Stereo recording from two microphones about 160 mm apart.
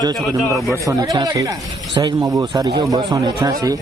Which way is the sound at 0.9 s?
25° right (ahead or behind).